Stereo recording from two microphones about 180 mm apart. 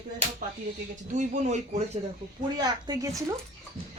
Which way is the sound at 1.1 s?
40° right (ahead or behind).